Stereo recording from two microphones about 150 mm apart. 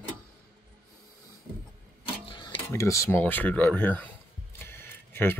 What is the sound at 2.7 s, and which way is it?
Speech, 20° left (ahead or behind).